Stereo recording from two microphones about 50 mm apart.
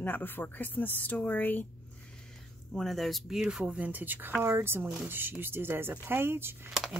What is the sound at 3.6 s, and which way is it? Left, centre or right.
Speech, right.